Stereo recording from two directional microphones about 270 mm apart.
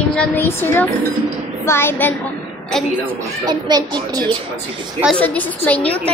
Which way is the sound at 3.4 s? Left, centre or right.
Centre.